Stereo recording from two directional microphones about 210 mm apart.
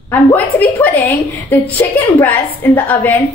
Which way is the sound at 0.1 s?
5° left (ahead or behind).